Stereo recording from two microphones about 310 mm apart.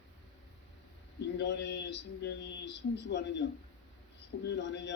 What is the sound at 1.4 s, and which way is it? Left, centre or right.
Speech, left.